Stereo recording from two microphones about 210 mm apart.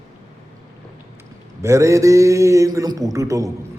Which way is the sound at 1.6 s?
15° right (ahead or behind).